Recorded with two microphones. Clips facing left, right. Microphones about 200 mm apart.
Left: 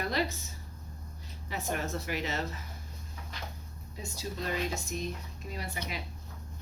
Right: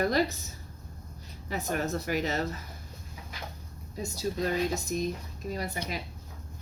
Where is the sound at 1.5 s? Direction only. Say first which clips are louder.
Right 4 dB; 40° right (ahead or behind).